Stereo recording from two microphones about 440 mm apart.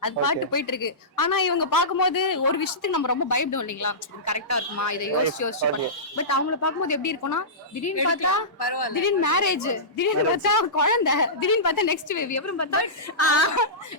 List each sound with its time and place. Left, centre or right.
0.0 s a woman's voice: left
8.5 s speech: left
8.9 s a woman's voice: left